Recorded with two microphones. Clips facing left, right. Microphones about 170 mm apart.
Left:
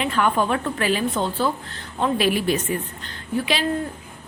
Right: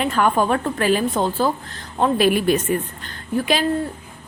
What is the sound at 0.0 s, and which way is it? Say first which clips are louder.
A woman's voice: right 2 dB; 40° right (ahead or behind).